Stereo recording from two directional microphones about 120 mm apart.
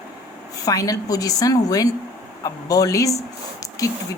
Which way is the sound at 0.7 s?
30° left (ahead or behind).